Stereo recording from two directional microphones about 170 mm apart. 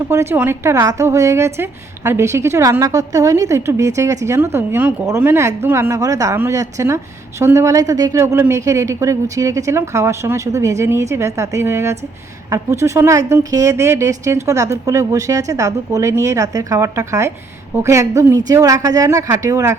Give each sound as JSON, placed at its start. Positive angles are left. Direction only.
{"t": 0.1, "sound": "a woman's voice", "side_deg": -15}